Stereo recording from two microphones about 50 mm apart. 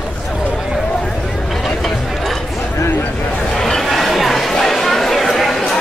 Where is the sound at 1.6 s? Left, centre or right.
Centre.